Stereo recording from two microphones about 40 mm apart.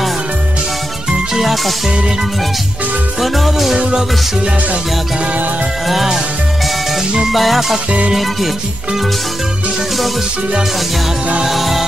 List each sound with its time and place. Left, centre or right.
1.3 s music: centre
3.2 s music: centre
3.7 s music: centre
5.2 s music: right
6.6 s music: centre
11.4 s music: centre